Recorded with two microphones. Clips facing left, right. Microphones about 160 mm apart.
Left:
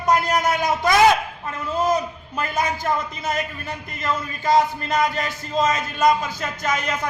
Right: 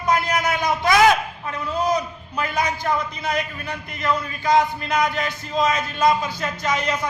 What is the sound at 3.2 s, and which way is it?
Speech, 45° left (ahead or behind).